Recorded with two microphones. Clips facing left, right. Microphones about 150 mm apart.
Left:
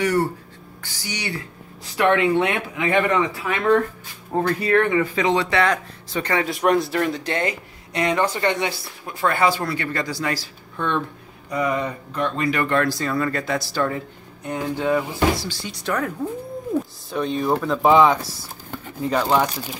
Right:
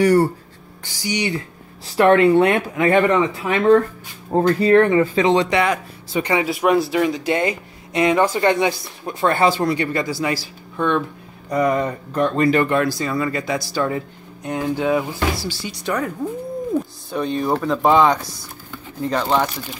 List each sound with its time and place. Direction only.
0.0 s speech: 35° right (ahead or behind)
1.0 s speech: 15° right (ahead or behind)
2.0 s speech: 40° right (ahead or behind)
3.1 s speech: 25° right (ahead or behind)
11.5 s speech: 45° right (ahead or behind)
12.6 s speech: 5° right (ahead or behind)
14.4 s speech: 15° right (ahead or behind)
15.4 s speech: 5° right (ahead or behind)
17.1 s speech: centre (ahead or behind)